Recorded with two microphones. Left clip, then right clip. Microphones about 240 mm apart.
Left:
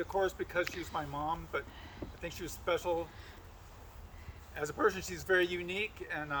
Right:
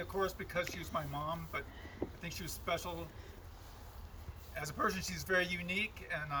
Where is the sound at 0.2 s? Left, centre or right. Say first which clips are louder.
Left 3 dB; centre.